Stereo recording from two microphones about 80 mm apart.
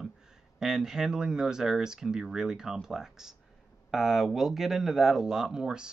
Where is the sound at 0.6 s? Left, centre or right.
Centre.